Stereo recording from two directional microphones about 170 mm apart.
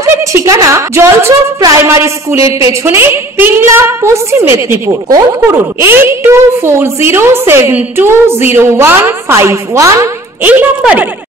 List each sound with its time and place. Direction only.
0.1 s a woman's voice: 15° right (ahead or behind)